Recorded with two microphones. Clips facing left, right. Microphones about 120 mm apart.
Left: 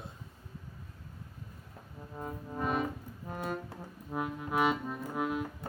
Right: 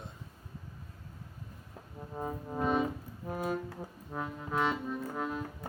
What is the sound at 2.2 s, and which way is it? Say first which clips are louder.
Music: right 3 dB; 25° right (ahead or behind).